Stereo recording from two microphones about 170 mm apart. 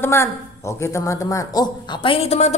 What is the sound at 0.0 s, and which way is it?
Speech, 15° left (ahead or behind).